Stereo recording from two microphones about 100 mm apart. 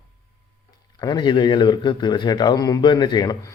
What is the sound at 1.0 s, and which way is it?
A man's voice, 50° left (ahead or behind).